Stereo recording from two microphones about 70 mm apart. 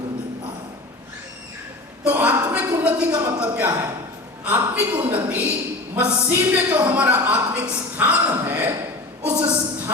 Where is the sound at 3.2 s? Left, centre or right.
Right.